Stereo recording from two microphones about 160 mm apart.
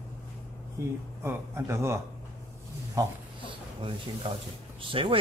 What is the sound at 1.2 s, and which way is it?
Speech, 15° right (ahead or behind).